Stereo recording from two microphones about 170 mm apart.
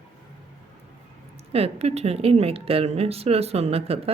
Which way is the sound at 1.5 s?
35° right (ahead or behind).